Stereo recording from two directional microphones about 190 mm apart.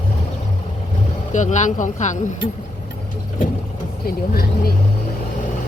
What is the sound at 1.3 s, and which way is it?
Speech, 40° left (ahead or behind).